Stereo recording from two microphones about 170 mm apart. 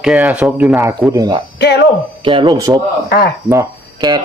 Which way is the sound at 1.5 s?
90° left.